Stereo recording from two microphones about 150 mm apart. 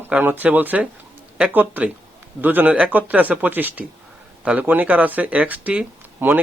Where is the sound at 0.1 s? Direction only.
10° right (ahead or behind).